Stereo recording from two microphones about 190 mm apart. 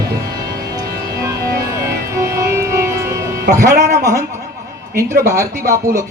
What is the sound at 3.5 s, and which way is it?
A man's voice, 15° right (ahead or behind).